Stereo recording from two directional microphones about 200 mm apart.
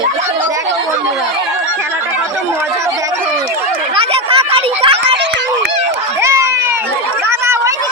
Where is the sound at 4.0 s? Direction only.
25° right (ahead or behind).